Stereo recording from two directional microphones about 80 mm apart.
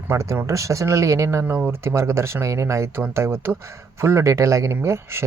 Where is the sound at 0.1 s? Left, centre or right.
Right.